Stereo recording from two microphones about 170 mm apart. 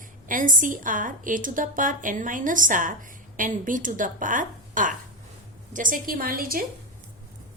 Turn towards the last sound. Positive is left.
turn(degrees=-60)  # may be behind; listen again after turning